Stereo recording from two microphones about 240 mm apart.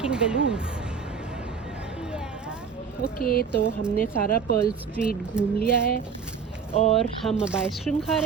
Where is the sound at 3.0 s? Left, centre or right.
Left.